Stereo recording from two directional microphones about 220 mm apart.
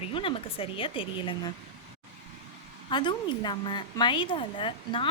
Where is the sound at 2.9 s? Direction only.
20° left (ahead or behind).